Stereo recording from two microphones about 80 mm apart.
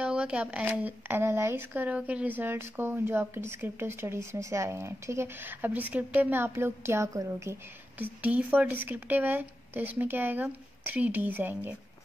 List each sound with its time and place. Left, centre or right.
0.0 s speech: centre
0.7 s a woman's voice: right
8.0 s a woman's voice: centre